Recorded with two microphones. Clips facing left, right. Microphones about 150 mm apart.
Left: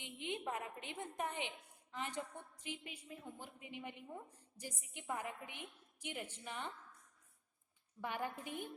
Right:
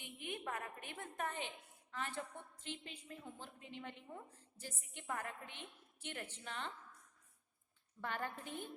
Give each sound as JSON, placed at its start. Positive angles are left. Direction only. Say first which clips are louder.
{"t": 0.0, "sound": "a woman's voice", "louder": "left 3 dB", "side_deg": 20}
{"t": 8.0, "sound": "a woman's voice", "louder": "left 1 dB", "side_deg": 15}